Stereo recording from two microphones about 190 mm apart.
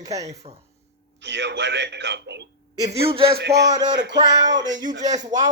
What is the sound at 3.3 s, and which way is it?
Music, 60° right (ahead or behind).